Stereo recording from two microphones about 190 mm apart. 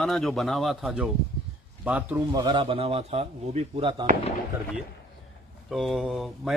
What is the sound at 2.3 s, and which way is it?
Speech, 25° right (ahead or behind).